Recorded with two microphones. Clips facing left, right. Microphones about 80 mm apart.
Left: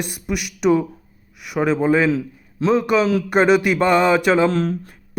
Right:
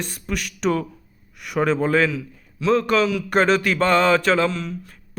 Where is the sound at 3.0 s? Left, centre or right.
Left.